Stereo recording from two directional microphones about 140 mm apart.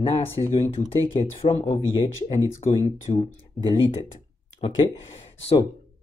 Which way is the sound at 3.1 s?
45° left (ahead or behind).